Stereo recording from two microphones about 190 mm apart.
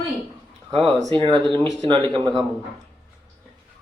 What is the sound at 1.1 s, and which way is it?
Speech, 25° right (ahead or behind).